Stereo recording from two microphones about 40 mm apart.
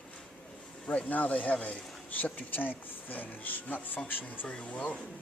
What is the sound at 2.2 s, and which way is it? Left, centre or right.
Speech, left.